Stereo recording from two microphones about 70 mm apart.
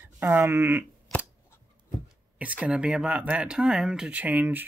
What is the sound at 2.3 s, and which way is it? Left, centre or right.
Speech, centre.